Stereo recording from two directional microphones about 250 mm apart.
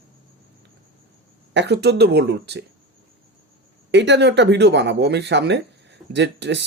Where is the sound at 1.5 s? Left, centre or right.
Right.